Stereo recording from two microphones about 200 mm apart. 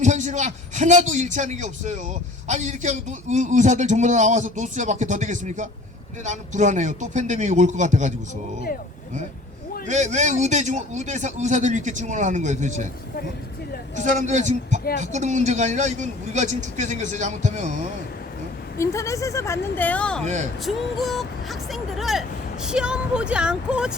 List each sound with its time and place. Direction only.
0.0 s a man's voice: 35° right (ahead or behind)
9.8 s a man's voice: 35° right (ahead or behind)
14.0 s a man's voice: 35° right (ahead or behind)
18.8 s speech: 15° left (ahead or behind); by 23.9 s 5° right (ahead or behind)